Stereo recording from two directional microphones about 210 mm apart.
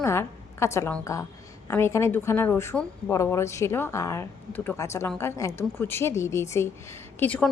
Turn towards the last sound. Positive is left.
turn(degrees=5)  # may be behind; listen again after turning